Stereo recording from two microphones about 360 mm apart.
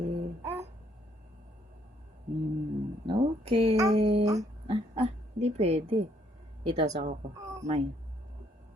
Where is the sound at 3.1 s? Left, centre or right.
Centre.